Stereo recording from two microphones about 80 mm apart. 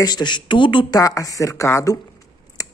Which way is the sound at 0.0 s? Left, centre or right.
Left.